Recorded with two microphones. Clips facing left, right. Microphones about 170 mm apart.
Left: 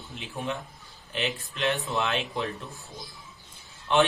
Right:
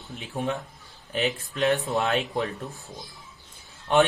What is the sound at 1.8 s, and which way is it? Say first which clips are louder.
Speech: right 4 dB; 40° right (ahead or behind).